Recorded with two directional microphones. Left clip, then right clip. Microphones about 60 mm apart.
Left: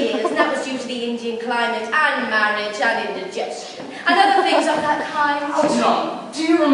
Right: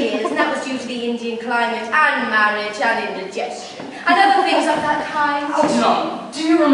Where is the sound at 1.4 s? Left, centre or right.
Left.